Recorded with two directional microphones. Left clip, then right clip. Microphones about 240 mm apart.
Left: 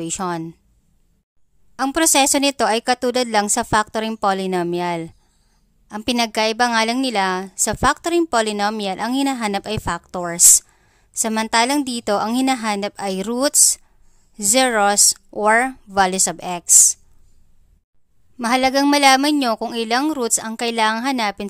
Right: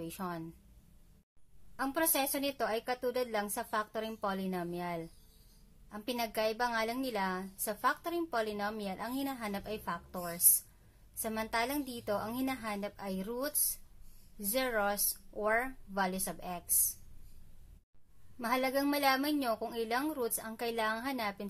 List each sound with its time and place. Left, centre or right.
0.0 s a woman's voice: left
1.8 s a woman's voice: left
18.4 s a woman's voice: left